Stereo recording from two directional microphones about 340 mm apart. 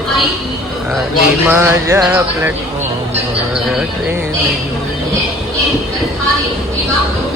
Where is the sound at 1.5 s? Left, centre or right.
Centre.